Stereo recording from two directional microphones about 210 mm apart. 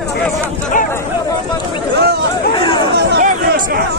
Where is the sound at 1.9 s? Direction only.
50° right (ahead or behind).